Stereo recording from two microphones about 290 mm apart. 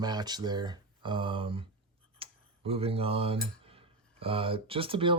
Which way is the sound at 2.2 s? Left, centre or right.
Centre.